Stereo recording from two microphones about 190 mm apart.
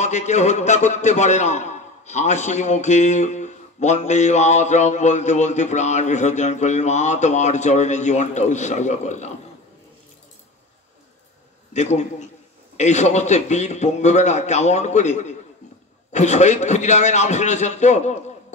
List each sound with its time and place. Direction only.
0.0 s a man's voice: 35° left (ahead or behind)
11.7 s a man's voice: 35° left (ahead or behind)